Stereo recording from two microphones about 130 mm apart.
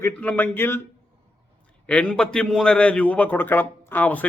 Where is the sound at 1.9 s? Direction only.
10° left (ahead or behind).